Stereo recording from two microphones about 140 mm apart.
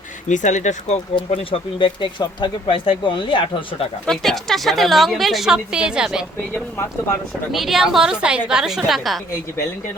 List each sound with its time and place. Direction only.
0.3 s speech: 60° left (ahead or behind)
1.1 s speech: 35° left (ahead or behind)
4.0 s a woman's voice: 5° left (ahead or behind)
7.5 s a woman's voice: centre (ahead or behind)